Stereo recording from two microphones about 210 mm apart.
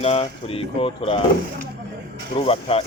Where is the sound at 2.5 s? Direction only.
25° left (ahead or behind).